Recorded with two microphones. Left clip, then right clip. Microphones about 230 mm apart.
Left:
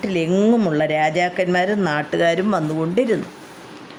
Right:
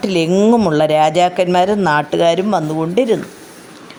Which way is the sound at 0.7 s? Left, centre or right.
Centre.